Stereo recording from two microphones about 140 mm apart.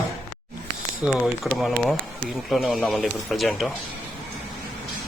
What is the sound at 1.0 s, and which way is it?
Speech, 5° right (ahead or behind).